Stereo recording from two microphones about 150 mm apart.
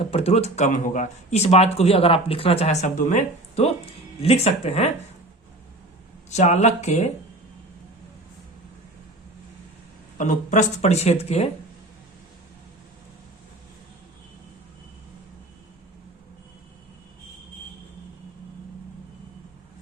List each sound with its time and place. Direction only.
0.0 s speech: 45° left (ahead or behind)
6.3 s speech: 50° left (ahead or behind)
10.2 s speech: 55° left (ahead or behind)